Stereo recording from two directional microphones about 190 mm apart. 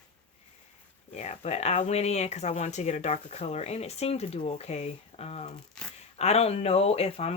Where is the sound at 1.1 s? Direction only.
35° left (ahead or behind).